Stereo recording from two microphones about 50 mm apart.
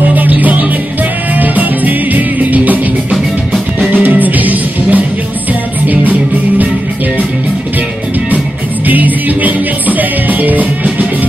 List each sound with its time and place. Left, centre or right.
0.1 s music: right
3.9 s music: right
8.8 s music: right